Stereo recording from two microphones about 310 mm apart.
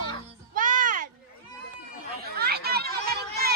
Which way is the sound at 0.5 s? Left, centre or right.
Right.